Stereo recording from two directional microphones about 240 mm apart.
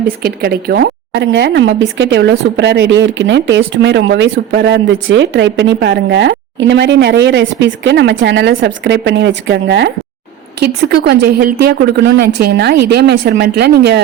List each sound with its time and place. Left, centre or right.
0.2 s a woman's voice: right